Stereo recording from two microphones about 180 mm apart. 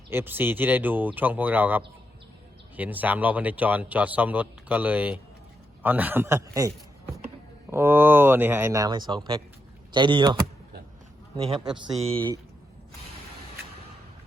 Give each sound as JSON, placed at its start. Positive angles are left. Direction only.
{"t": 0.1, "sound": "a man's voice", "side_deg": -10}
{"t": 11.6, "sound": "speech", "side_deg": -5}